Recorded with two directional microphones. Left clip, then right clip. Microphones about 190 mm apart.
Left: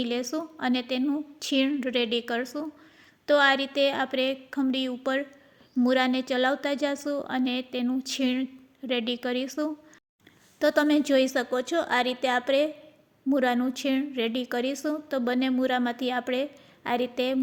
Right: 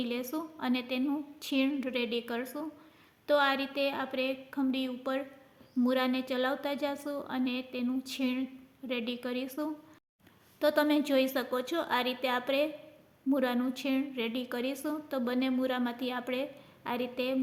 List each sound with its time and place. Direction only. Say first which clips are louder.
0.0 s a woman's voice: left 6 dB; 30° left (ahead or behind)